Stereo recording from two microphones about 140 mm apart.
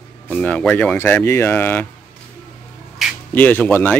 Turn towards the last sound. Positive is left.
turn(degrees=15)  # may be behind; listen again after turning